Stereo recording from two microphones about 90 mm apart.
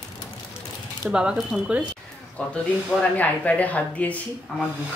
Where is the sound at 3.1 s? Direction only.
15° left (ahead or behind).